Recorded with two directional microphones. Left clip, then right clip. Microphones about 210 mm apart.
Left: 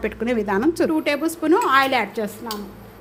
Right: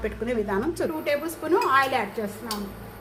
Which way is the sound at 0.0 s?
45° left (ahead or behind).